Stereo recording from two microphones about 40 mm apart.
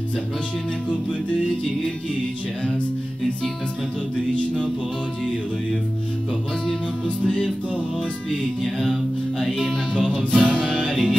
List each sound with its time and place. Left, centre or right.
9.4 s music: centre
9.9 s music: centre